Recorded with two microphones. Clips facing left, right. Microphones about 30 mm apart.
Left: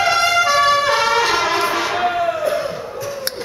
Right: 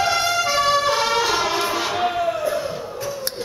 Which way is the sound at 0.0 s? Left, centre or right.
Left.